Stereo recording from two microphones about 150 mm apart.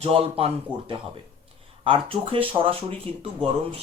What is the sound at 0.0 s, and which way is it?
Speech, 40° right (ahead or behind).